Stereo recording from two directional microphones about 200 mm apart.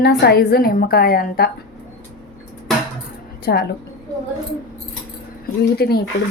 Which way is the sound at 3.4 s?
50° left (ahead or behind).